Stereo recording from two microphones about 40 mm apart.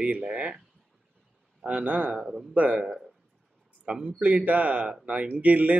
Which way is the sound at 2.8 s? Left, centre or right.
Centre.